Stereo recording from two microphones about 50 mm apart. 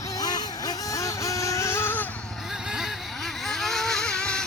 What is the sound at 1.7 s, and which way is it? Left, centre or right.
Vehicle, left.